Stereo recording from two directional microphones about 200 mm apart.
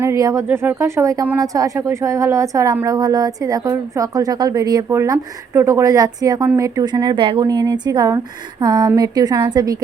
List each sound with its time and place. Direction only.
0.0 s a woman's voice: 15° right (ahead or behind)